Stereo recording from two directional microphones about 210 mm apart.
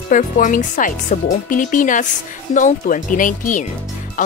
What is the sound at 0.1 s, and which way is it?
Speech, 40° left (ahead or behind).